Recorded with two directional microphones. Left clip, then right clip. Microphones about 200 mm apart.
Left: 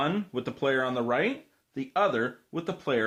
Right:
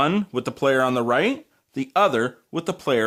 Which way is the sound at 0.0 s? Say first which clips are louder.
Right 7 dB; 45° right (ahead or behind).